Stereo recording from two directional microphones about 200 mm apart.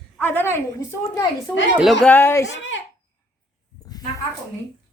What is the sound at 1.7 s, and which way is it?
Speech, centre (ahead or behind).